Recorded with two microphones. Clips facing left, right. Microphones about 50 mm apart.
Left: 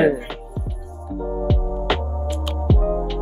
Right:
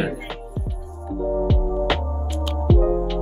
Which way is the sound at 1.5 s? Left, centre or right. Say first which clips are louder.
Right 1 dB; centre.